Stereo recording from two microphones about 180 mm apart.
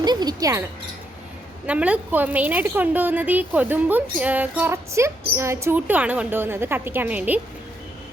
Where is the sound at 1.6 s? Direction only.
5° right (ahead or behind).